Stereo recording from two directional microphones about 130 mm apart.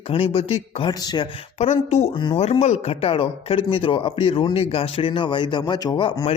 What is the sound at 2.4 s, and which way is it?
A man's voice, 55° left (ahead or behind).